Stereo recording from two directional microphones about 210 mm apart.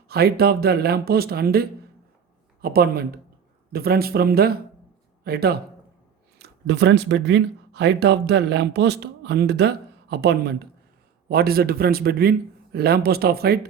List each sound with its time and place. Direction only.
0.1 s a man's voice: 50° right (ahead or behind)